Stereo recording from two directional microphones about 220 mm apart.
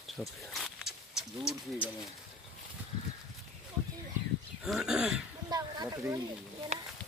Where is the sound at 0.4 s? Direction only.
Centre (ahead or behind).